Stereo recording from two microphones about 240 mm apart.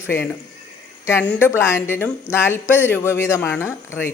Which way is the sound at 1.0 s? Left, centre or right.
Centre.